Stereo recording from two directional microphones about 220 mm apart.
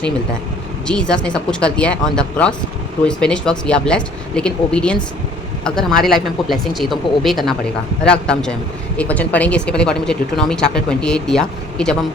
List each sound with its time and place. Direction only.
0.9 s speech: 5° left (ahead or behind)